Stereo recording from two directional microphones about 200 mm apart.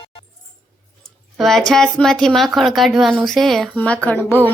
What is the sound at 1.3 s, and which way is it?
Speech, centre (ahead or behind).